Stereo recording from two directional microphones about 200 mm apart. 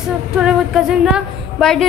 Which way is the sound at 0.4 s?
5° right (ahead or behind).